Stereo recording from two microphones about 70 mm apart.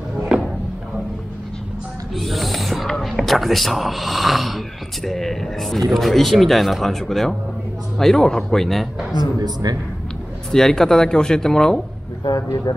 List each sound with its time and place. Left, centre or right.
2.1 s speech: centre
9.1 s speech: right
10.5 s speech: centre
12.7 s speech: left